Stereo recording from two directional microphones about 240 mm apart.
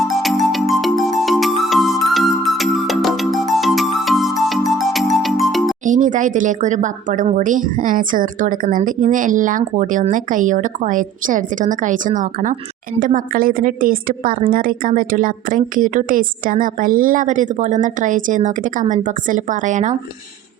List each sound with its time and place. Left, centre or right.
0.0 s music: centre
5.8 s speech: right